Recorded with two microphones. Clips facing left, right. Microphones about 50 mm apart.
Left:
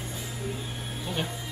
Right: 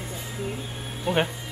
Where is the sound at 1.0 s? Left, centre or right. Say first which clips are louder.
Right 9 dB; right.